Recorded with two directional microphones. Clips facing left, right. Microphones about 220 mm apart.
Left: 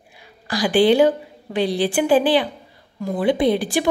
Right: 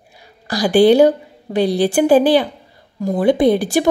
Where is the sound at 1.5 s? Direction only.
40° right (ahead or behind).